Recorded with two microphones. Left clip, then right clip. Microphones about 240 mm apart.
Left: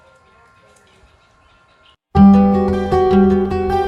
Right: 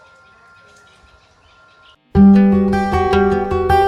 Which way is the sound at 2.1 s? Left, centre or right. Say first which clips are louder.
Left 1 dB; centre.